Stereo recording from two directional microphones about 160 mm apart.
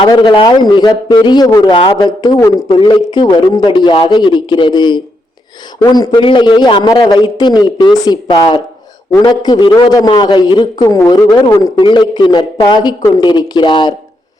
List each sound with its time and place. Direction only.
0.0 s a man's voice: 30° left (ahead or behind)